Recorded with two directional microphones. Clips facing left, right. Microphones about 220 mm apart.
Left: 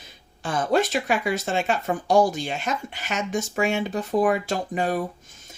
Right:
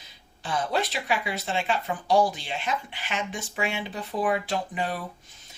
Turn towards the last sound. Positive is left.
turn(degrees=45)  # may be behind; listen again after turning